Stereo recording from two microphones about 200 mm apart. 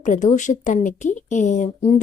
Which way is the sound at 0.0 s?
35° left (ahead or behind).